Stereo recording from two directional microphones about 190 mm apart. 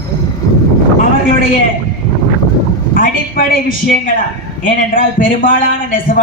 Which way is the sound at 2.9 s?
45° left (ahead or behind).